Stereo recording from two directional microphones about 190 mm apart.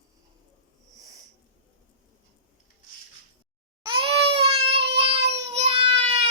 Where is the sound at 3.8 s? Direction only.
30° right (ahead or behind).